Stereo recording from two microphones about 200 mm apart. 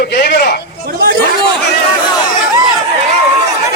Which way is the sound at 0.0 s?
55° left (ahead or behind).